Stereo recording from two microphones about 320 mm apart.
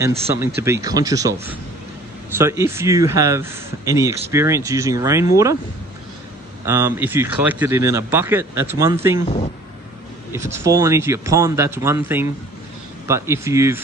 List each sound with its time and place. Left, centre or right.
0.0 s speech: centre
6.6 s speech: centre
10.3 s speech: centre